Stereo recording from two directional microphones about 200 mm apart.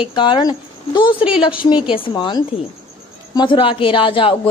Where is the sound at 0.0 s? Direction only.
25° left (ahead or behind).